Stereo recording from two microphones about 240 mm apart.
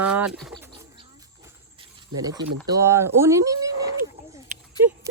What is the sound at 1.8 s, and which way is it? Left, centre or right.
Cricket, centre.